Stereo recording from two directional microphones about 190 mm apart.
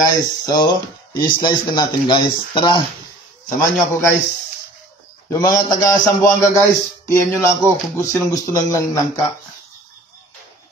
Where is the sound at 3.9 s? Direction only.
15° left (ahead or behind).